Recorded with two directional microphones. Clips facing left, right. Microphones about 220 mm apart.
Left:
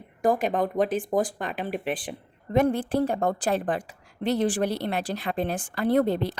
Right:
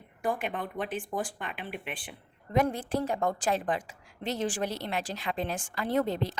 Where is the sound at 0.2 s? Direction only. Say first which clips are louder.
Left 9 dB; 40° left (ahead or behind).